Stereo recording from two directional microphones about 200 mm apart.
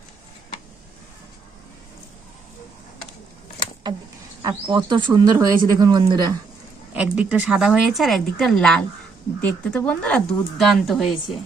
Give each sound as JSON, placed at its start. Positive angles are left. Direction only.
{"t": 4.4, "sound": "speech", "side_deg": -20}
{"t": 6.9, "sound": "speech", "side_deg": -5}